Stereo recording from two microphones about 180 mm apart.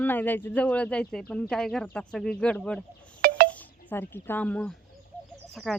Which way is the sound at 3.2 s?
55° right (ahead or behind).